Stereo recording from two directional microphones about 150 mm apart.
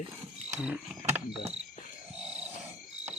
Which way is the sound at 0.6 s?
5° right (ahead or behind).